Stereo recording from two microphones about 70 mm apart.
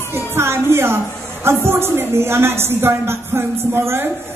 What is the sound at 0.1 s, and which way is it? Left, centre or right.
A woman's voice, right.